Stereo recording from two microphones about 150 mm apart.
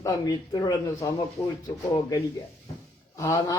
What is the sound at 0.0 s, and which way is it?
Speech, 25° left (ahead or behind).